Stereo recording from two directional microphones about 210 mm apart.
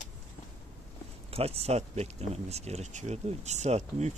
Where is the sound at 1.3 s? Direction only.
30° right (ahead or behind).